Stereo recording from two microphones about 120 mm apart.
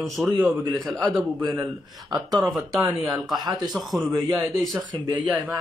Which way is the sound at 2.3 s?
Centre (ahead or behind).